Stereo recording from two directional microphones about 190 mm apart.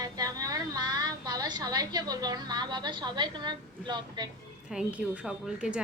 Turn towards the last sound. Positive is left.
turn(degrees=-5)  # may be behind; listen again after turning